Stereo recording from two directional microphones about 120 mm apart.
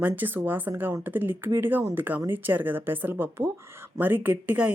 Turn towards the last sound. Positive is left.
turn(degrees=-10)  # may be behind; listen again after turning